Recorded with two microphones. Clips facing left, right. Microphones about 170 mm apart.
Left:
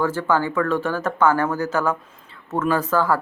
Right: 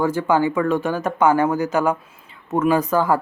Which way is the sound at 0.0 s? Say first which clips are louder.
Right 3 dB; 15° right (ahead or behind).